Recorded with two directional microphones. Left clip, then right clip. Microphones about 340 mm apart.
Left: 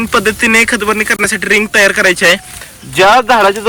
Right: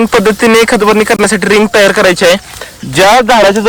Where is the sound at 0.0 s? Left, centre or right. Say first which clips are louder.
Right 4 dB; centre.